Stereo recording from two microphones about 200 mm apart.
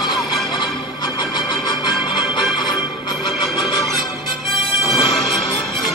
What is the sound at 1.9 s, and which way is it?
Music, centre (ahead or behind).